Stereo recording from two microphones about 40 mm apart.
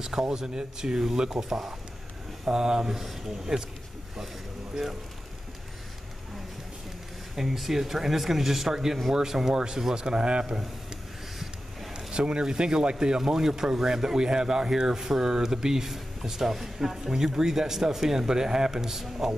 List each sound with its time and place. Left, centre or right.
0.0 s speech: centre
7.3 s speech: centre; by 10.4 s right
11.9 s speech: right